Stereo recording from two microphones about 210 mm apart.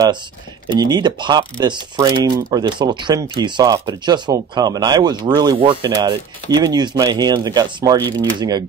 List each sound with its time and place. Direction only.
0.7 s speech: 20° right (ahead or behind)